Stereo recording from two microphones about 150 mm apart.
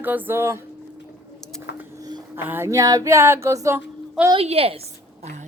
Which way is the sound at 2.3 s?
15° right (ahead or behind).